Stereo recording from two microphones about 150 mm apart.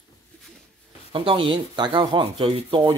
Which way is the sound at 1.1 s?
40° right (ahead or behind).